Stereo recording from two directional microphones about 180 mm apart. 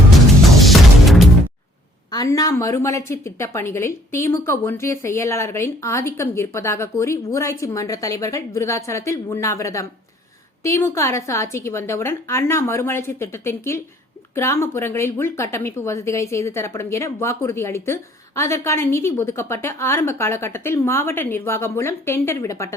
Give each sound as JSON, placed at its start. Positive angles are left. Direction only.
{"t": 0.6, "sound": "music", "side_deg": 0}
{"t": 2.0, "sound": "speech", "side_deg": 20}